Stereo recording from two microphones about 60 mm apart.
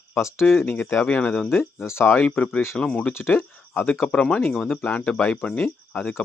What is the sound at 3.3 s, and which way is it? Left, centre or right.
Speech, left.